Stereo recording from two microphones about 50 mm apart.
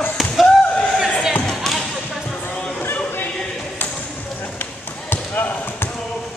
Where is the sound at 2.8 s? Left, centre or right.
Left.